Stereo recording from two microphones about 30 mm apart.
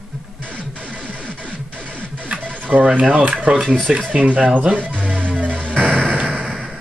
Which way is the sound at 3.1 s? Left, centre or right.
Right.